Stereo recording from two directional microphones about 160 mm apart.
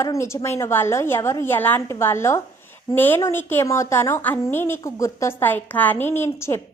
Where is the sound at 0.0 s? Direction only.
15° left (ahead or behind).